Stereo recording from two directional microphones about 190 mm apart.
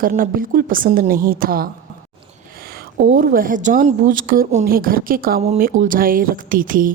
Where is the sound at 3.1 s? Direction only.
50° right (ahead or behind).